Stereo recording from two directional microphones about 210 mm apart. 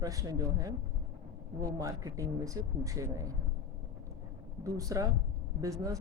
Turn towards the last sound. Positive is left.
turn(degrees=-15)  # may be behind; listen again after turning